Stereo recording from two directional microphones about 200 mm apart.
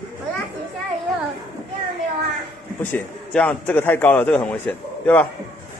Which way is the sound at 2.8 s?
10° left (ahead or behind).